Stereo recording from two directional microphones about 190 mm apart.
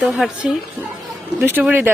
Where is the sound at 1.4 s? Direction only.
10° right (ahead or behind).